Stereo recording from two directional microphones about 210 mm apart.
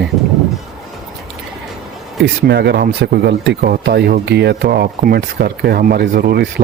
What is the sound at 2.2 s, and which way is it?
A man's voice, 55° right (ahead or behind).